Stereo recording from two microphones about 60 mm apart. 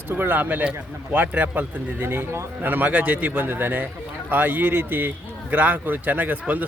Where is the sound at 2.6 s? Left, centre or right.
Right.